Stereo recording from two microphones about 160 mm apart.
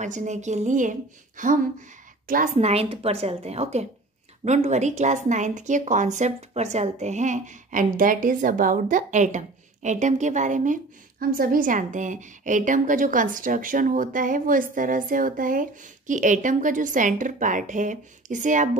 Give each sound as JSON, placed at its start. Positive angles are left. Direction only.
{"t": 0.0, "sound": "a woman's voice", "side_deg": -50}
{"t": 2.5, "sound": "a woman's voice", "side_deg": -40}